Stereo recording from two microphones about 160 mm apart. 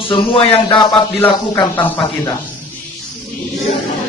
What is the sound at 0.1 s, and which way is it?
Speech, 35° left (ahead or behind).